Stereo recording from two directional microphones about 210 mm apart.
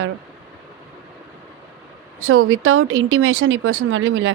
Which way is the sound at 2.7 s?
65° right (ahead or behind).